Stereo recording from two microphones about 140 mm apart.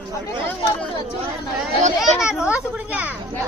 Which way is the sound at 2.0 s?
5° right (ahead or behind).